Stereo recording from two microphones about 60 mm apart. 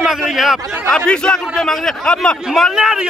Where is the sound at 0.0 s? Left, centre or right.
Centre.